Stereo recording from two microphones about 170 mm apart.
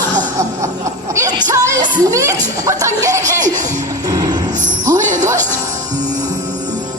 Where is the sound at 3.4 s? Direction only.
45° right (ahead or behind).